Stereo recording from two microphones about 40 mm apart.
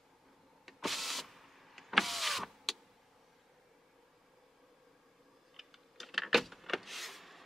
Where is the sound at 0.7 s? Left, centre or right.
Centre.